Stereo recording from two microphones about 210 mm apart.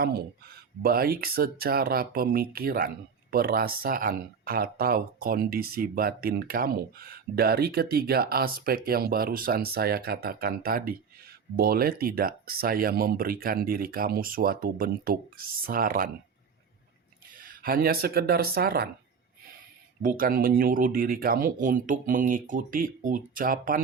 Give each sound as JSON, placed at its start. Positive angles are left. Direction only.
{"t": 0.0, "sound": "speech", "side_deg": -50}
{"t": 17.4, "sound": "speech", "side_deg": -45}
{"t": 20.0, "sound": "speech", "side_deg": -40}